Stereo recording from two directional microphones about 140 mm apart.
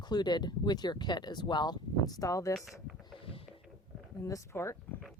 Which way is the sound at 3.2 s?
40° left (ahead or behind).